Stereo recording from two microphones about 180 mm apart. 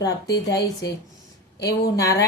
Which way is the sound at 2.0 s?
20° left (ahead or behind).